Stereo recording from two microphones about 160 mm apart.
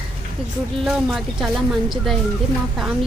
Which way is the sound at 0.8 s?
5° right (ahead or behind).